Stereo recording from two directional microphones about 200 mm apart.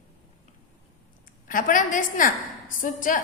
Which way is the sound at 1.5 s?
40° left (ahead or behind).